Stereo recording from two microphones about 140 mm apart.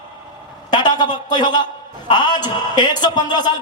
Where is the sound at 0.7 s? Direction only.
30° left (ahead or behind).